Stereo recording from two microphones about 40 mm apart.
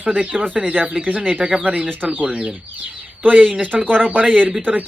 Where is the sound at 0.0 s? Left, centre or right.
Right.